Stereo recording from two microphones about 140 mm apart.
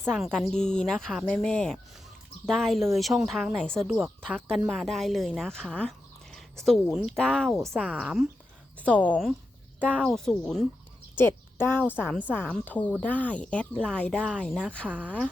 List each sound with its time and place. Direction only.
0.1 s speech: 5° left (ahead or behind)
9.0 s speech: 10° left (ahead or behind)
11.2 s a woman's voice: 15° left (ahead or behind)
14.8 s speech: 10° right (ahead or behind)